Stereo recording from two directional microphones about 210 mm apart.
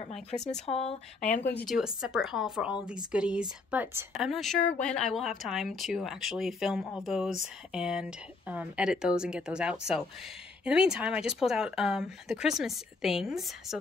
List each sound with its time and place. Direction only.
0.6 s speech: 30° left (ahead or behind)
1.2 s speech: 5° left (ahead or behind)